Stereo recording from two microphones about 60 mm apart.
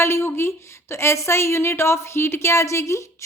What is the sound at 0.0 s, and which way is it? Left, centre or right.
A woman's voice, left.